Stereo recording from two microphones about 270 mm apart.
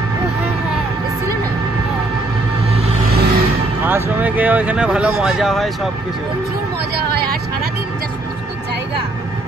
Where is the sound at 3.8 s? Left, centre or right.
Centre.